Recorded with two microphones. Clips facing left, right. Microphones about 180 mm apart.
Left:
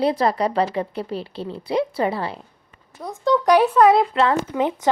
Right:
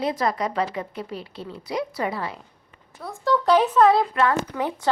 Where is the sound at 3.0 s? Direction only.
20° left (ahead or behind).